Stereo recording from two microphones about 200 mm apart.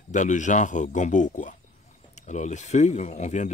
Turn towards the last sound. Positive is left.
turn(degrees=35)  # may be behind; listen again after turning